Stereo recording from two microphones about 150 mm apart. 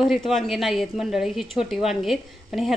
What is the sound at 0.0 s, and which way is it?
A woman's voice, centre (ahead or behind).